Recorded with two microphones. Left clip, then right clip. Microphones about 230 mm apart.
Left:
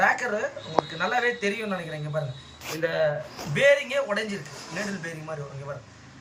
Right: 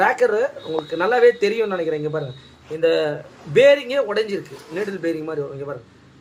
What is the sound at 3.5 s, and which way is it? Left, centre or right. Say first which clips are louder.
Speech: right 7 dB; right.